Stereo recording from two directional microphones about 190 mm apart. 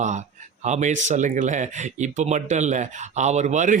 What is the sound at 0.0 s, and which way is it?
A man's voice, 40° right (ahead or behind).